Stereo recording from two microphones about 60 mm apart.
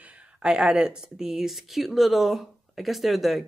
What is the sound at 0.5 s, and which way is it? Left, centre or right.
Speech, centre.